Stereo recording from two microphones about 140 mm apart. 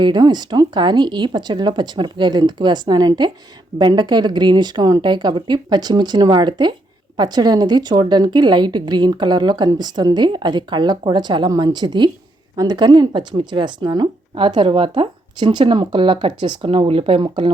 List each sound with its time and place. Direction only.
0.0 s speech: 30° right (ahead or behind)